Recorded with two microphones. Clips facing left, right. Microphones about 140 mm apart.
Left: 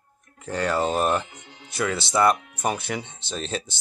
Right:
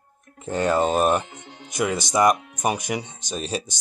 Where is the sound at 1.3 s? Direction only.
50° right (ahead or behind).